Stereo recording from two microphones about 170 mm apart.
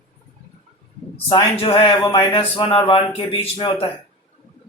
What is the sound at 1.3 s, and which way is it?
Speech, 35° left (ahead or behind).